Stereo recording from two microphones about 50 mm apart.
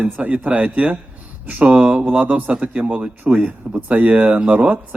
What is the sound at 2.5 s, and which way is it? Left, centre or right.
Speech, right.